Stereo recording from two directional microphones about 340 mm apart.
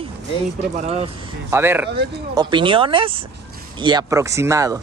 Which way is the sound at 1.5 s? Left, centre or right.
Centre.